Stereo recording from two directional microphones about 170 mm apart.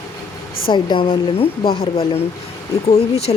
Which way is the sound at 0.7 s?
30° left (ahead or behind).